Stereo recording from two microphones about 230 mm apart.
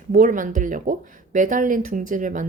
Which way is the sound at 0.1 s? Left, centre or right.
Right.